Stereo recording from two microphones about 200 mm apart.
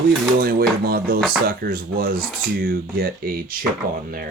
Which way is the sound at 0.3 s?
50° right (ahead or behind).